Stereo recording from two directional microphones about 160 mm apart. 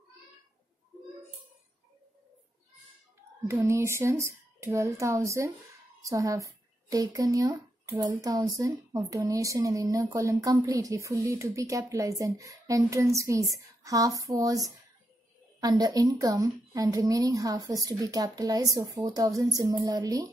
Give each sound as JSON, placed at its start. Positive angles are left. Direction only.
{"t": 3.4, "sound": "a woman's voice", "side_deg": -15}